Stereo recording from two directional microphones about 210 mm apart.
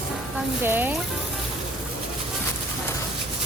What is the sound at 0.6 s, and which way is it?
Speech, 10° right (ahead or behind).